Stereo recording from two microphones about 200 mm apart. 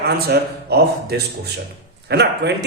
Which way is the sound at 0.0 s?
55° right (ahead or behind).